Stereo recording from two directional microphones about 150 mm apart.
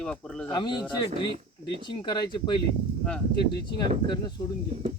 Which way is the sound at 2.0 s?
30° left (ahead or behind).